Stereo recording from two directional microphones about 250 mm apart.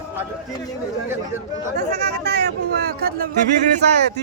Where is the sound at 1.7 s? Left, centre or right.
Right.